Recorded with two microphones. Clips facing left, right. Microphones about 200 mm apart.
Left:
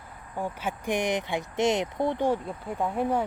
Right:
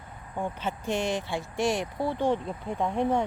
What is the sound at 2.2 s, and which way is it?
Speech, 5° left (ahead or behind).